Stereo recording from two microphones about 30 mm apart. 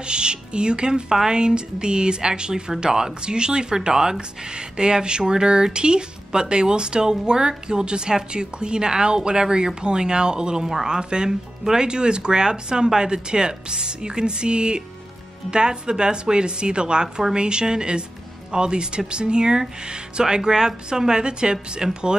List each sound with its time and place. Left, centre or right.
0.0 s speech: right